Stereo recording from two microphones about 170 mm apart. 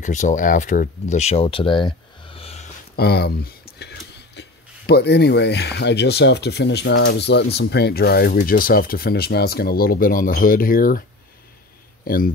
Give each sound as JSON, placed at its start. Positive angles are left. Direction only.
{"t": 0.0, "sound": "speech", "side_deg": 45}
{"t": 3.0, "sound": "speech", "side_deg": 70}
{"t": 7.5, "sound": "speech", "side_deg": 70}